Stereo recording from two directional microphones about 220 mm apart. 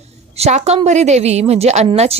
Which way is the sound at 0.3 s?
30° right (ahead or behind).